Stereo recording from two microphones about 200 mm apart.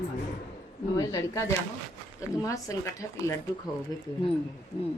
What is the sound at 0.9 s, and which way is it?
Speech, 15° left (ahead or behind).